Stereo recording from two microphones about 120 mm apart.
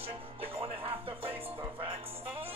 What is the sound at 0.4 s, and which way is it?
Music, 50° right (ahead or behind).